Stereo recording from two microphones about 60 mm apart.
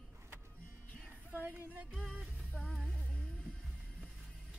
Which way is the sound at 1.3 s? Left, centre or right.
Right.